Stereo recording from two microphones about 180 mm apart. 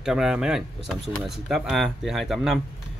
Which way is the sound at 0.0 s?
5° right (ahead or behind).